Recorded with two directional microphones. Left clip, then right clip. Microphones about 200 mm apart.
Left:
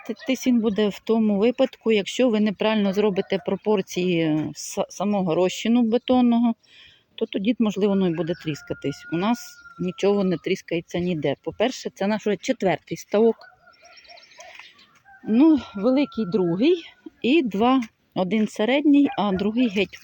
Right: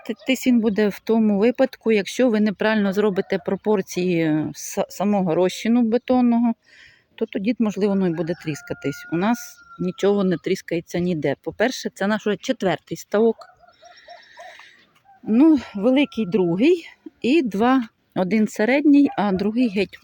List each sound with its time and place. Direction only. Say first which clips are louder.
0.8 s speech: right 2 dB; 15° right (ahead or behind)
15.3 s a woman's voice: right 2 dB; 10° right (ahead or behind)
18.6 s speech: right 2 dB; 55° right (ahead or behind)
18.9 s speech: right 2 dB; 15° right (ahead or behind)